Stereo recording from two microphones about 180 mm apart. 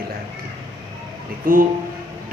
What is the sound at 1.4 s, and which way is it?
Speech, 50° right (ahead or behind).